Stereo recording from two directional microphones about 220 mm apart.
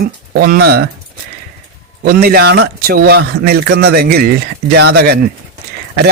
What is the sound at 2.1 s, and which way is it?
A man's voice, 45° right (ahead or behind).